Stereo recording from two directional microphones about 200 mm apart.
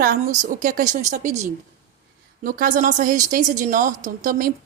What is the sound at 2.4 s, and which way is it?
A woman's voice, 45° right (ahead or behind).